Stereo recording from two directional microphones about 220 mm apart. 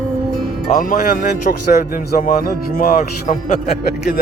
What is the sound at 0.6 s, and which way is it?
Speech, 40° left (ahead or behind).